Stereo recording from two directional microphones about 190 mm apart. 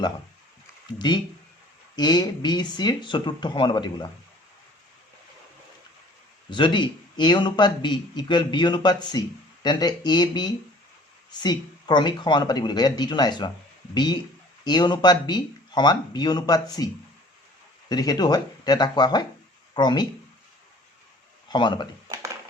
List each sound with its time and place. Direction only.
0.9 s speech: 25° left (ahead or behind)
6.5 s speech: 25° left (ahead or behind)
21.5 s speech: 25° left (ahead or behind)